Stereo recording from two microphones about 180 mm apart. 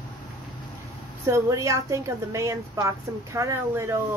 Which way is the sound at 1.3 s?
15° right (ahead or behind).